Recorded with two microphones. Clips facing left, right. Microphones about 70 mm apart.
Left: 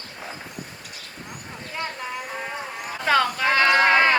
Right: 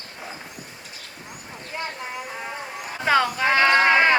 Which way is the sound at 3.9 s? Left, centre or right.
Centre.